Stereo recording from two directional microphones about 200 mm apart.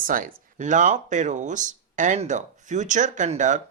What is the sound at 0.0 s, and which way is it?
Speech, 45° right (ahead or behind).